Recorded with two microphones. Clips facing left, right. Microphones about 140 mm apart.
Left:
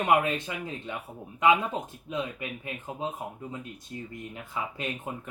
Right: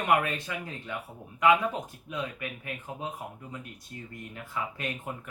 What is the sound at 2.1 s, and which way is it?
Speech, 25° left (ahead or behind).